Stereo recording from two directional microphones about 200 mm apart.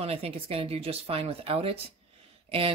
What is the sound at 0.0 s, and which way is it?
Speech, 30° right (ahead or behind).